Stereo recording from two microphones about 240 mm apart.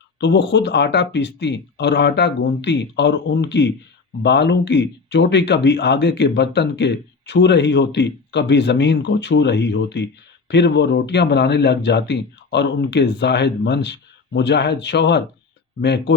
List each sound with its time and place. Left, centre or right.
0.2 s speech: left